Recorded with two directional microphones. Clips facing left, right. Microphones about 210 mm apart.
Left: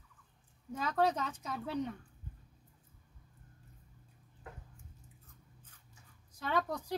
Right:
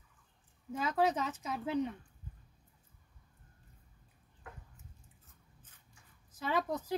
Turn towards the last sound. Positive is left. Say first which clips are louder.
# right 1 dB
turn(degrees=-5)  # may be behind; listen again after turning